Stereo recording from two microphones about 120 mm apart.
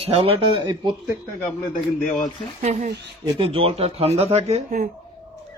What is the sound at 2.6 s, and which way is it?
Speech, 75° right (ahead or behind).